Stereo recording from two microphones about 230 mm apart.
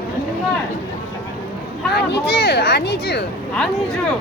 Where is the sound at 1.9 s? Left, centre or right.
Left.